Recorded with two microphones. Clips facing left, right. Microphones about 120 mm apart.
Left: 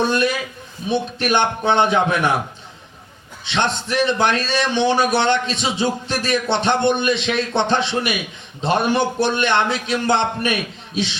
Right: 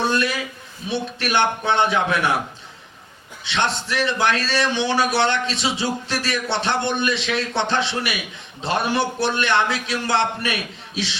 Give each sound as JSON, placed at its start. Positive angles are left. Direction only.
{"t": 0.0, "sound": "a sound", "side_deg": 20}
{"t": 0.9, "sound": "a man's voice", "side_deg": 20}
{"t": 3.4, "sound": "a man's voice", "side_deg": 20}